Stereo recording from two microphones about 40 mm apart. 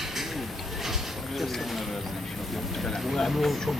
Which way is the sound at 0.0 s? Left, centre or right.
Centre.